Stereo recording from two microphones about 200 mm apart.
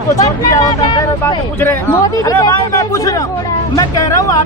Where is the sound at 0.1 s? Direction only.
15° left (ahead or behind).